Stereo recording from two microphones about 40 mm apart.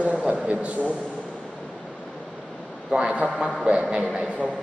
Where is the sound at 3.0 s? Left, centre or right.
Right.